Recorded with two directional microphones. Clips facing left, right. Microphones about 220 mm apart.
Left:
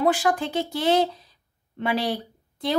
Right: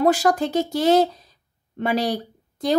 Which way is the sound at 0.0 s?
40° right (ahead or behind).